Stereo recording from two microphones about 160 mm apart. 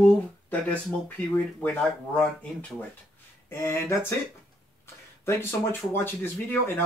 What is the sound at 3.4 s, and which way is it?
Speech, 15° left (ahead or behind).